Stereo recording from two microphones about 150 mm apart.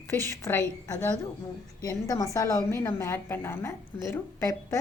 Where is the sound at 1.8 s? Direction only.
25° left (ahead or behind).